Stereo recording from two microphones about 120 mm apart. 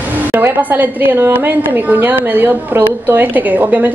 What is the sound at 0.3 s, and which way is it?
A woman's voice, 15° right (ahead or behind).